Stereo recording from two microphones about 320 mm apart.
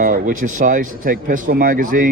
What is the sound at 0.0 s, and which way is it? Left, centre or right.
Speech, right.